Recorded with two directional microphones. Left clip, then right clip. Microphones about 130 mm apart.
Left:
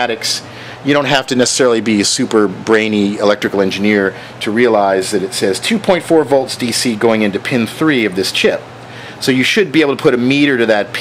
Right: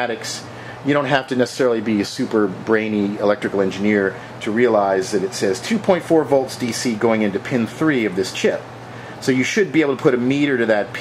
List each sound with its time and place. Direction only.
0.0 s speech: 35° left (ahead or behind)